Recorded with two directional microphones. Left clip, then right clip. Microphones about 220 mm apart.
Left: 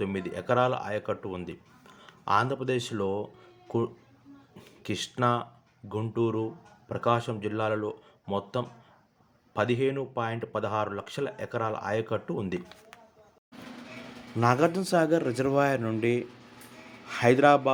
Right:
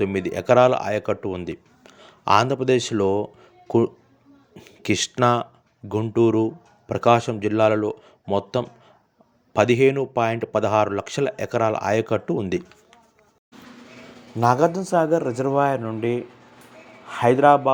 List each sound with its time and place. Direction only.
0.0 s speech: 30° right (ahead or behind)
4.5 s speech: 30° right (ahead or behind)
14.3 s a man's voice: 5° right (ahead or behind)